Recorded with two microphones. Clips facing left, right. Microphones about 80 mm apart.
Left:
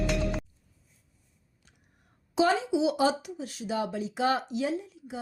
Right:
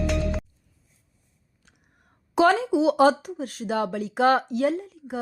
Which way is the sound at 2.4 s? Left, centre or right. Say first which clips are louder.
Right 5 dB; right.